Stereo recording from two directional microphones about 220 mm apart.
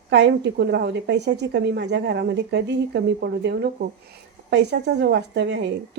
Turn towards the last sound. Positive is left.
turn(degrees=-50)  # may be behind; listen again after turning